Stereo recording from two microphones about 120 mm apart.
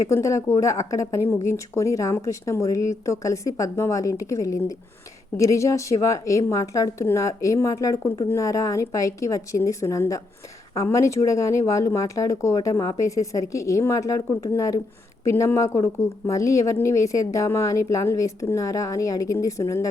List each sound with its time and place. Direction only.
0.1 s a woman's voice: 25° left (ahead or behind)